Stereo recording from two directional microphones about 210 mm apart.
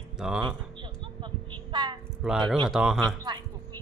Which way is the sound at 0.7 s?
25° right (ahead or behind).